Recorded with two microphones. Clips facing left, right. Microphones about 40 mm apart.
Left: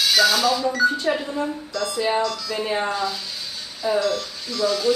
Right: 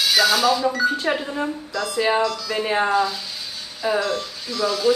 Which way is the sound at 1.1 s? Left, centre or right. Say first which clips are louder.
Even; right.